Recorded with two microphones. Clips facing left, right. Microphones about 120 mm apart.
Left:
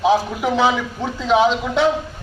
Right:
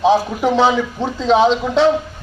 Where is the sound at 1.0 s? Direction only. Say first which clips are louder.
Right 2 dB; 25° right (ahead or behind).